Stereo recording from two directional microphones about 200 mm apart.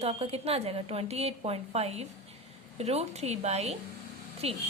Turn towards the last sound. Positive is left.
turn(degrees=-30)  # may be behind; listen again after turning